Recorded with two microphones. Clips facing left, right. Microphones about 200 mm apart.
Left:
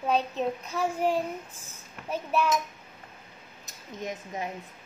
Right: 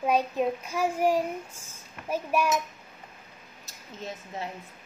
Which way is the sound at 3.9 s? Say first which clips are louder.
Left 2 dB; 15° left (ahead or behind).